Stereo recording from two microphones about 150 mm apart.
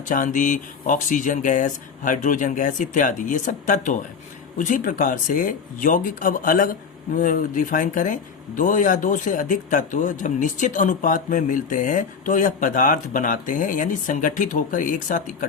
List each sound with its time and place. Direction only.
0.1 s speech: 60° left (ahead or behind)